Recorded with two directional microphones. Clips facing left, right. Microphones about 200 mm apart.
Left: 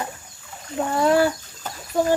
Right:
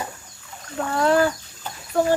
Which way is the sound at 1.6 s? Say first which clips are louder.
Left 2 dB; 45° left (ahead or behind).